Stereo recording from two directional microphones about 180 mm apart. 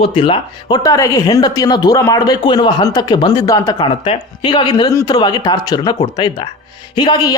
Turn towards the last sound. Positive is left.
turn(degrees=25)  # may be behind; listen again after turning